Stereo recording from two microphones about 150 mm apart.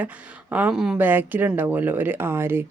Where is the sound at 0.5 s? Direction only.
5° right (ahead or behind).